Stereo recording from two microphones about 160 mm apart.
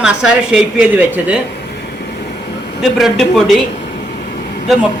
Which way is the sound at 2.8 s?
Centre (ahead or behind).